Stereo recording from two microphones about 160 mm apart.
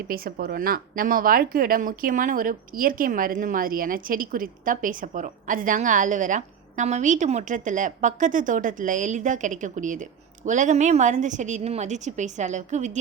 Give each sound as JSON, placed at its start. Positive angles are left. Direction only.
{"t": 0.0, "sound": "speech", "side_deg": -65}